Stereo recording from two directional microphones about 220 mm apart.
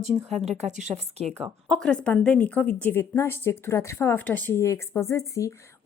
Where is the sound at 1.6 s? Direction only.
5° left (ahead or behind).